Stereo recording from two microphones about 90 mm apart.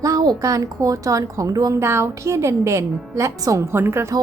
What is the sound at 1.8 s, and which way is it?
A woman's voice, 30° right (ahead or behind).